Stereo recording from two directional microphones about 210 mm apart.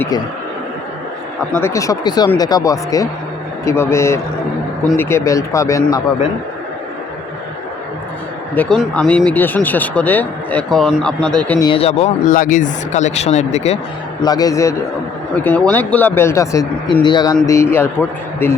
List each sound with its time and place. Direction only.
1.5 s speech: 15° left (ahead or behind)
8.5 s speech: 5° left (ahead or behind)
11.6 s speech: 25° left (ahead or behind)
14.2 s speech: 20° left (ahead or behind)